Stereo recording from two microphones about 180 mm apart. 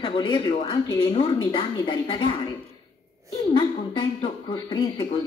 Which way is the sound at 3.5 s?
25° left (ahead or behind).